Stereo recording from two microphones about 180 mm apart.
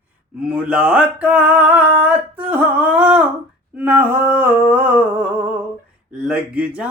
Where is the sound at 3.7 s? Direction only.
10° right (ahead or behind).